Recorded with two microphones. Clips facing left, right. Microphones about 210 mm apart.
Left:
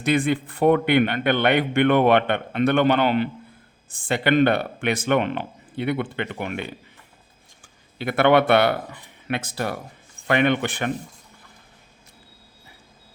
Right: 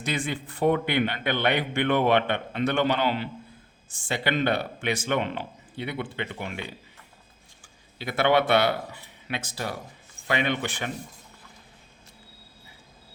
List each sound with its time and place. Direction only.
0.0 s a man's voice: 55° left (ahead or behind)
7.9 s a man's voice: 60° left (ahead or behind)